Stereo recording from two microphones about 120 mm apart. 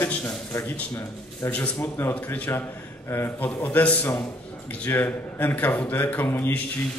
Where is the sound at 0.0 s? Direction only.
15° left (ahead or behind).